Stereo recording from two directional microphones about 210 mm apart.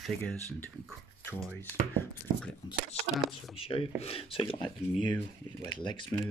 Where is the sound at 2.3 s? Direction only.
45° right (ahead or behind).